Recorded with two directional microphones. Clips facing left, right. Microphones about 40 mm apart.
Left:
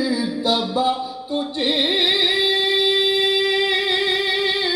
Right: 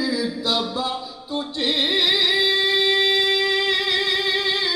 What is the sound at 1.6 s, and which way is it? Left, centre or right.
Music, centre.